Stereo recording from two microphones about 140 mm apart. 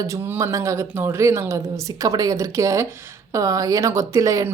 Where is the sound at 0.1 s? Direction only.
20° right (ahead or behind).